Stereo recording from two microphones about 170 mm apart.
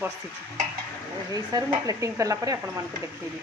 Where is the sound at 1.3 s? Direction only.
20° right (ahead or behind).